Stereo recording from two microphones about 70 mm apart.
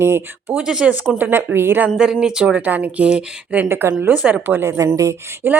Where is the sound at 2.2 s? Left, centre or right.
Centre.